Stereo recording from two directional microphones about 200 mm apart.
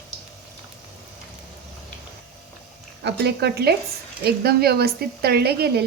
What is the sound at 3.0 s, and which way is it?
A woman's voice, 55° right (ahead or behind).